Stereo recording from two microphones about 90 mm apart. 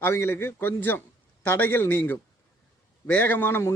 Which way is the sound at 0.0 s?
30° left (ahead or behind).